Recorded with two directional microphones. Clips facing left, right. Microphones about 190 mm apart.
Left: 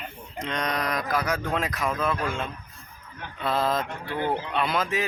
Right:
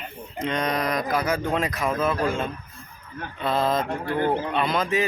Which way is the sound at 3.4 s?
Centre (ahead or behind).